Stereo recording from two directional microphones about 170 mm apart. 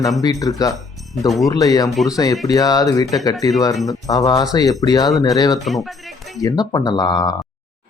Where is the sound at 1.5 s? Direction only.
20° left (ahead or behind).